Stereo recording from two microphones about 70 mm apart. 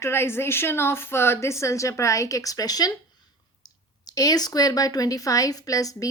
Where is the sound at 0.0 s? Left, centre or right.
Left.